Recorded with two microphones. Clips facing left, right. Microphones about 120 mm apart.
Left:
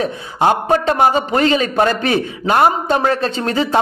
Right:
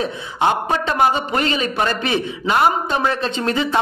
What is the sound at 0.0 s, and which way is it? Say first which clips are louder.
A man's voice: left 3 dB; 40° left (ahead or behind).